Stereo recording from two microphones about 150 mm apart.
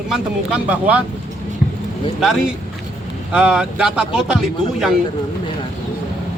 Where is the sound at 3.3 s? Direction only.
5° right (ahead or behind).